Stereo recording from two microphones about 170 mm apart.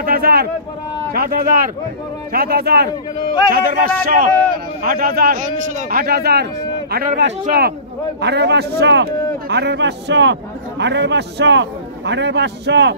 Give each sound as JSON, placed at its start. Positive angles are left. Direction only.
{"t": 0.0, "sound": "a sound", "side_deg": -65}
{"t": 1.1, "sound": "a man's voice", "side_deg": -60}
{"t": 3.5, "sound": "speech", "side_deg": -55}
{"t": 8.2, "sound": "a man's voice", "side_deg": -80}